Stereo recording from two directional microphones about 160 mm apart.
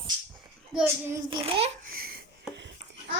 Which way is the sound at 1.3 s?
35° right (ahead or behind).